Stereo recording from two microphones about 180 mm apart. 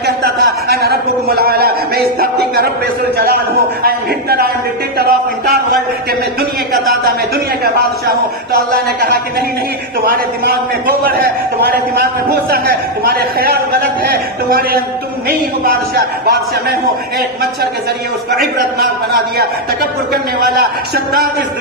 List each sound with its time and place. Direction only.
0.0 s a man's voice: 60° right (ahead or behind)
3.8 s a man's voice: 55° right (ahead or behind)
5.5 s a man's voice: 60° right (ahead or behind)
8.5 s a man's voice: 60° right (ahead or behind)
11.0 s a man's voice: 55° right (ahead or behind)
18.3 s a man's voice: 60° right (ahead or behind)